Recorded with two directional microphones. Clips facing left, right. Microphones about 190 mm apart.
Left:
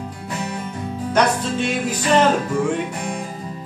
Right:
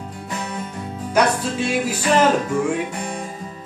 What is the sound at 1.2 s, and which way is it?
Music, 10° right (ahead or behind).